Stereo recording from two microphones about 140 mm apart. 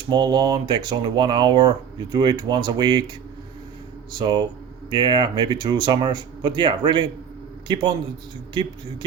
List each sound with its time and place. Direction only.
0.1 s speech: 30° right (ahead or behind)
4.2 s speech: 30° right (ahead or behind)